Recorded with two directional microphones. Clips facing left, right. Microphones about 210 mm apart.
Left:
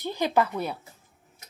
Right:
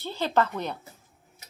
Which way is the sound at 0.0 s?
15° left (ahead or behind).